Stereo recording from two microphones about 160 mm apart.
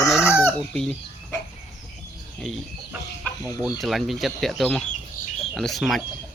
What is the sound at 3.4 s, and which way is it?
Speech, centre (ahead or behind).